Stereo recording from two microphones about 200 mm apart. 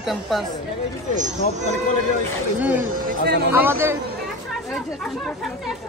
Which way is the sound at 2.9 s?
45° right (ahead or behind).